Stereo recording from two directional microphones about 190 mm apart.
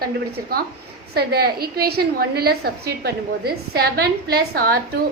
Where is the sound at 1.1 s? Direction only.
55° right (ahead or behind).